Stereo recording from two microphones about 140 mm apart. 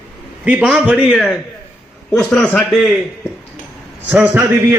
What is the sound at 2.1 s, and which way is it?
Speech, 5° left (ahead or behind).